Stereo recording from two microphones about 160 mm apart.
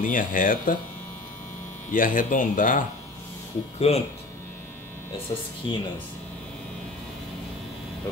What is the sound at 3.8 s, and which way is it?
Speech, 40° left (ahead or behind).